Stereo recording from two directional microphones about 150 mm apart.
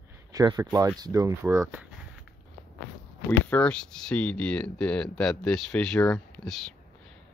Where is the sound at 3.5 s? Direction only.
5° left (ahead or behind).